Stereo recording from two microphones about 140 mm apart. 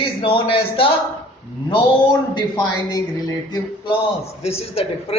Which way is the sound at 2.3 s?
30° left (ahead or behind).